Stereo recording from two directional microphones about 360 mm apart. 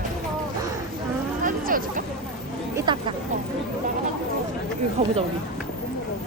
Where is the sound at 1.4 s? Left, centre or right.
Right.